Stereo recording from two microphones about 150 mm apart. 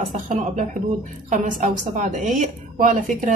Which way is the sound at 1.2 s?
60° right (ahead or behind).